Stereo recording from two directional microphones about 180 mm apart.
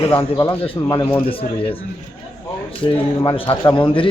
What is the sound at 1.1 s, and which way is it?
Speech, 30° left (ahead or behind).